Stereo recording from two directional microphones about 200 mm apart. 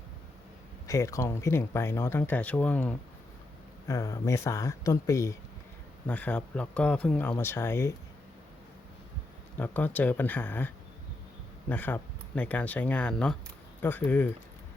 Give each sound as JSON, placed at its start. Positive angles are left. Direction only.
{"t": 0.9, "sound": "speech", "side_deg": 15}
{"t": 9.6, "sound": "speech", "side_deg": 10}
{"t": 11.7, "sound": "speech", "side_deg": 10}